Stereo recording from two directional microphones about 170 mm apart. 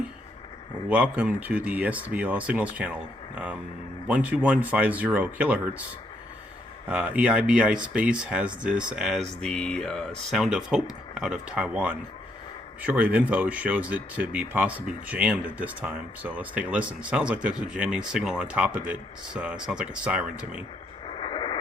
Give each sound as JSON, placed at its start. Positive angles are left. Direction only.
{"t": 0.9, "sound": "speech", "side_deg": -10}
{"t": 6.8, "sound": "speech", "side_deg": -5}
{"t": 21.1, "sound": "radio", "side_deg": 30}